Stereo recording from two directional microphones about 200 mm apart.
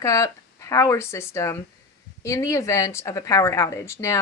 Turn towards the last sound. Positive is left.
turn(degrees=15)  # may be behind; listen again after turning